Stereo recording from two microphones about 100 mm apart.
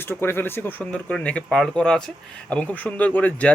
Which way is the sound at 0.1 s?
20° left (ahead or behind).